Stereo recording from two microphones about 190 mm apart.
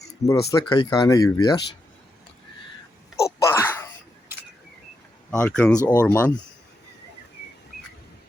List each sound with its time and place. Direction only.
0.2 s speech: 15° left (ahead or behind)
3.5 s a sound: 10° left (ahead or behind)
5.4 s speech: 5° left (ahead or behind)
5.7 s speech: 15° left (ahead or behind)